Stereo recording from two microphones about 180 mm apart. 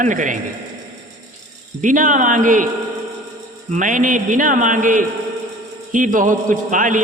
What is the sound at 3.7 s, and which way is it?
A man's voice, 45° right (ahead or behind).